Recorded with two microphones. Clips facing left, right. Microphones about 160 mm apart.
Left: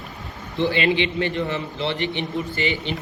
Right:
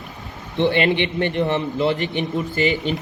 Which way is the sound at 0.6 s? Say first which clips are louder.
Right 2 dB; 55° right (ahead or behind).